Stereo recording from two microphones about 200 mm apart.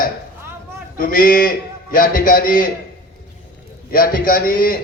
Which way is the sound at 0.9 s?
45° left (ahead or behind).